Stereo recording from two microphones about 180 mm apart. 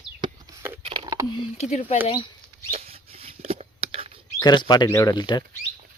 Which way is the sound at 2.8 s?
35° right (ahead or behind).